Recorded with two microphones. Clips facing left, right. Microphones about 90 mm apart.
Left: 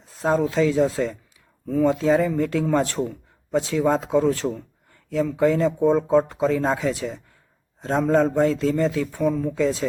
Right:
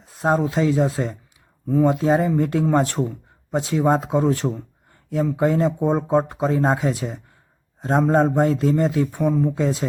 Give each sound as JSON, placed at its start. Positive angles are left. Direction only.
{"t": 0.2, "sound": "speech", "side_deg": -35}
{"t": 3.0, "sound": "a sound", "side_deg": -30}
{"t": 3.7, "sound": "speech", "side_deg": -30}